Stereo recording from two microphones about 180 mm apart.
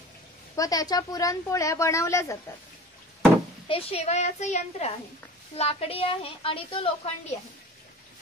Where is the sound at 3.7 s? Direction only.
35° left (ahead or behind).